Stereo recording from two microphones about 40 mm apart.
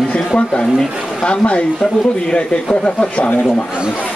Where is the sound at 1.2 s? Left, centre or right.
Left.